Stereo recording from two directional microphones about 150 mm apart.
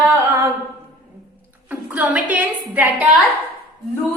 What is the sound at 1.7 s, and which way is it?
A woman's voice, 10° right (ahead or behind).